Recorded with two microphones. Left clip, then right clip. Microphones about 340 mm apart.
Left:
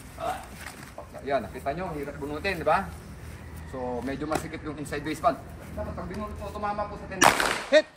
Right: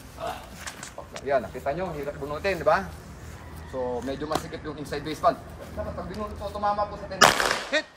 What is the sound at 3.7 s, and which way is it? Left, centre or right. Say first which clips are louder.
Speech: right 2 dB; centre.